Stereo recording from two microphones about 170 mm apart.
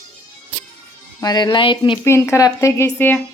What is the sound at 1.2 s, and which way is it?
Speech, 25° left (ahead or behind).